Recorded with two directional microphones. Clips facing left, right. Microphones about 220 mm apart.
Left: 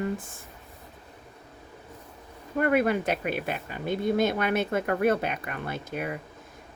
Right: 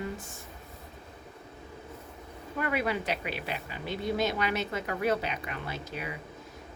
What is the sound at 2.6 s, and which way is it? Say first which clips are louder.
Speech: left 7 dB; 50° left (ahead or behind).